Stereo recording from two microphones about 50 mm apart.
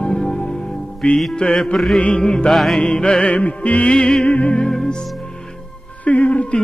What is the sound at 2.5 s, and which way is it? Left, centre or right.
Music, centre.